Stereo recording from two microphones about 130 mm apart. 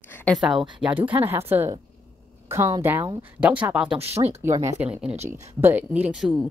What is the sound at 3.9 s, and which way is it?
Speech, 50° right (ahead or behind).